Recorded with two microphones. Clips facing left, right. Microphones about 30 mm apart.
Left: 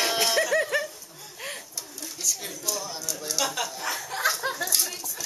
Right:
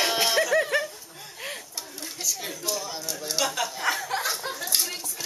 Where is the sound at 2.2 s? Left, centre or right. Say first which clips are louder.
Even; centre.